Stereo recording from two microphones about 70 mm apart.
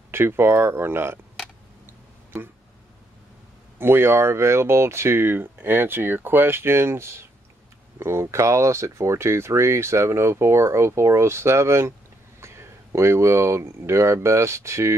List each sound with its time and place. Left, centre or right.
0.1 s speech: right
1.9 s a sound: right
3.7 s speech: right